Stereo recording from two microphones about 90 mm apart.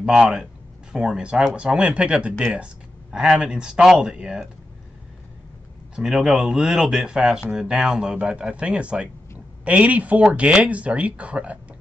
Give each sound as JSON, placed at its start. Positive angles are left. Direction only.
{"t": 0.0, "sound": "speech", "side_deg": -10}
{"t": 5.9, "sound": "speech", "side_deg": -5}